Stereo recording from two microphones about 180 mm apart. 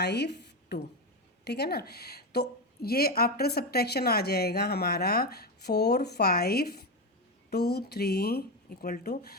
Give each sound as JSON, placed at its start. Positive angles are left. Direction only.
{"t": 0.0, "sound": "a woman's voice", "side_deg": 65}